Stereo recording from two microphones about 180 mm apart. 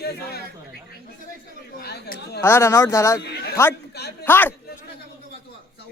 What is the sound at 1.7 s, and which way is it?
Chatter, 65° left (ahead or behind).